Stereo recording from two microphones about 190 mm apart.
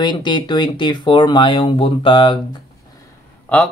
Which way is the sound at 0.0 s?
25° left (ahead or behind).